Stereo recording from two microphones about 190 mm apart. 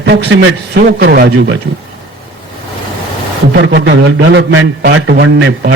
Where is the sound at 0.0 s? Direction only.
60° right (ahead or behind).